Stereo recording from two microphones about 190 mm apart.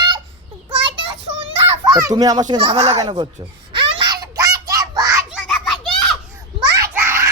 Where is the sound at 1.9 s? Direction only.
20° right (ahead or behind).